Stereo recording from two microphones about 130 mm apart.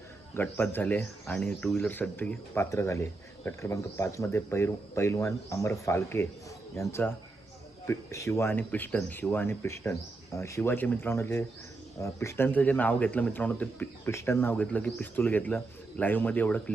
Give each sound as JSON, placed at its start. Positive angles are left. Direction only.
{"t": 0.3, "sound": "speech", "side_deg": 15}
{"t": 7.9, "sound": "speech", "side_deg": 20}